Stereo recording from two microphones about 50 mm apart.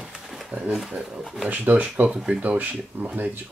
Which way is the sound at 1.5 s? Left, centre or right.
Right.